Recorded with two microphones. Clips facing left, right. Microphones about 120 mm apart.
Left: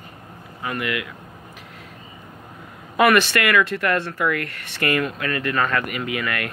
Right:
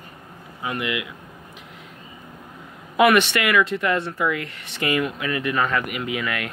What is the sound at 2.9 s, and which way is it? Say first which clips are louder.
Speech: even; 15° right (ahead or behind).